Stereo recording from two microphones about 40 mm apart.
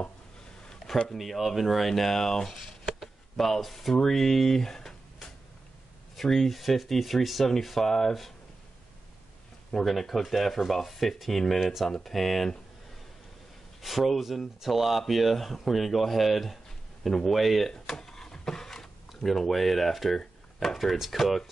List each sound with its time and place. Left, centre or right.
0.8 s a sound: centre
1.1 s speech: centre
2.5 s speech: centre
9.7 s speech: centre
13.7 s speech: centre